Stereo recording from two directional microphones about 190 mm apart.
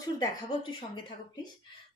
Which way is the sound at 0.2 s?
25° left (ahead or behind).